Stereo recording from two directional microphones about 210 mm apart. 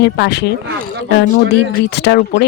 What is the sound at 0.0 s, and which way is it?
Speech, 55° left (ahead or behind).